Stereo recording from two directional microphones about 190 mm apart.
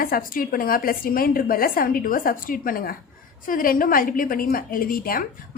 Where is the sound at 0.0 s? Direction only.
50° left (ahead or behind).